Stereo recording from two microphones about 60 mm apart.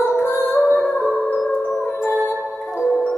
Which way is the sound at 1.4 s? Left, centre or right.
Centre.